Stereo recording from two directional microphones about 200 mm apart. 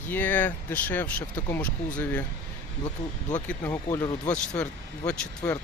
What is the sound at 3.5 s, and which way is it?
Speech, 15° left (ahead or behind).